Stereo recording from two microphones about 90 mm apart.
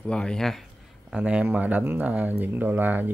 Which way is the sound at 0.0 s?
10° left (ahead or behind).